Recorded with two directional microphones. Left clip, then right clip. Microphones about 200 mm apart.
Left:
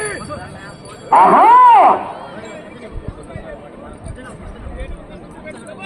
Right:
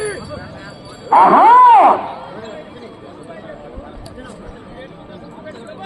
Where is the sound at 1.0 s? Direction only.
45° right (ahead or behind).